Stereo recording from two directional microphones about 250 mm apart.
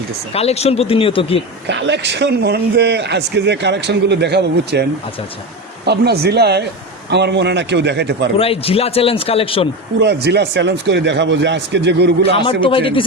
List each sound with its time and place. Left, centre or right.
0.3 s speech: left
1.6 s a man's voice: right
8.4 s speech: left
10.0 s a man's voice: right
12.3 s speech: left